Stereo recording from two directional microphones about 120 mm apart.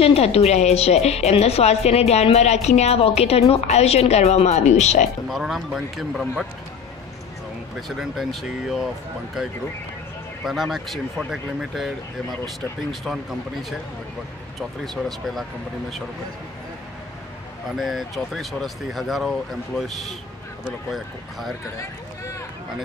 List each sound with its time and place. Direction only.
0.0 s a woman's voice: 55° left (ahead or behind); by 5.0 s 75° left (ahead or behind)
5.3 s speech: centre (ahead or behind)
8.0 s speech: centre (ahead or behind)
10.4 s speech: centre (ahead or behind)
17.6 s speech: centre (ahead or behind)